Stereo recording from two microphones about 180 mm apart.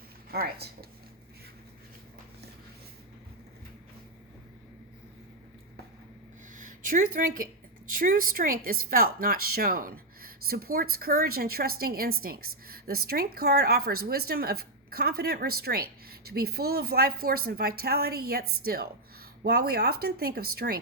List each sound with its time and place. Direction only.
0.3 s a woman's voice: 60° right (ahead or behind)
6.5 s a woman's voice: 45° right (ahead or behind)